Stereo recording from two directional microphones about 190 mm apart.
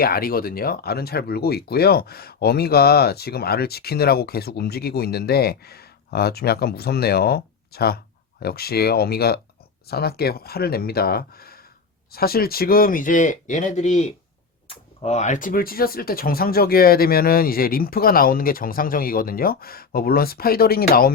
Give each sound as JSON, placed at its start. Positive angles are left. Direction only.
{"t": 0.0, "sound": "speech", "side_deg": 50}